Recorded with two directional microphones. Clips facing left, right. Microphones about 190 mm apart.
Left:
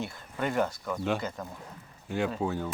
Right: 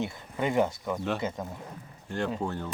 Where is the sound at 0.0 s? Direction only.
15° right (ahead or behind).